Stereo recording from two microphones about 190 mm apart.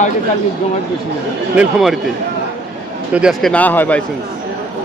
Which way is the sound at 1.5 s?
Centre (ahead or behind).